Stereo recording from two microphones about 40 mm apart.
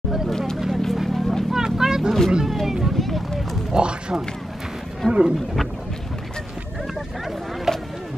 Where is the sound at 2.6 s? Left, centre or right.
Centre.